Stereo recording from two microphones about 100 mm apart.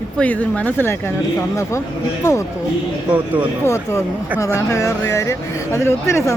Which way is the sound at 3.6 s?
30° left (ahead or behind).